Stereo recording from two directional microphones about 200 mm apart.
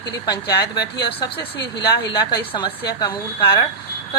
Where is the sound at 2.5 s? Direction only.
25° left (ahead or behind).